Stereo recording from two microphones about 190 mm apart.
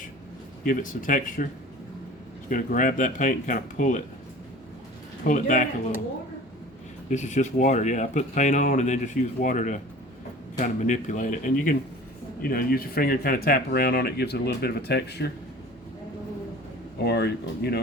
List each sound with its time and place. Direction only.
0.6 s speech: 45° left (ahead or behind)
2.5 s speech: 45° left (ahead or behind)
5.2 s speech: 45° left (ahead or behind)
7.1 s speech: 40° left (ahead or behind); by 15.3 s 60° left (ahead or behind)
17.0 s speech: 60° left (ahead or behind)